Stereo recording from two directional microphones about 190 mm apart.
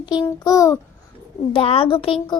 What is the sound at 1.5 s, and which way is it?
Child singing, 30° left (ahead or behind).